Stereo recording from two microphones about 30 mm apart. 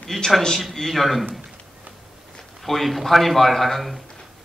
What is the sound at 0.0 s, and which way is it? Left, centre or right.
A man's voice, centre.